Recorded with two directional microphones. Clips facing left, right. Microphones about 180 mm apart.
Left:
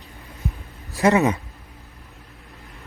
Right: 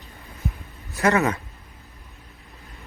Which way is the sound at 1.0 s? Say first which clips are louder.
Left 3 dB; 20° left (ahead or behind).